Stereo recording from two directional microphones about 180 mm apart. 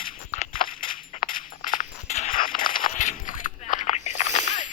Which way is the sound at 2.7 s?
45° left (ahead or behind).